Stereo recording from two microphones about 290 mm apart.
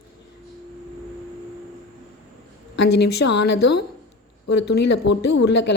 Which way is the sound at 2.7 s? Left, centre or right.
Left.